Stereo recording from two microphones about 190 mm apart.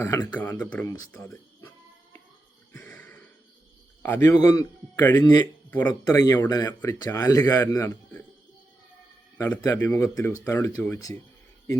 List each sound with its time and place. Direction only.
0.0 s speech: 15° left (ahead or behind)
2.7 s a sound: 15° left (ahead or behind)
4.0 s speech: 15° left (ahead or behind)
9.4 s speech: 15° left (ahead or behind)